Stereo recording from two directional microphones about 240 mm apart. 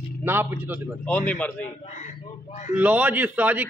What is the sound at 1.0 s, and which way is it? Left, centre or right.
Speech, centre.